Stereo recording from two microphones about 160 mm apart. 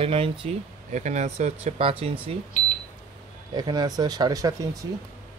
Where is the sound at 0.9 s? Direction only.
50° right (ahead or behind).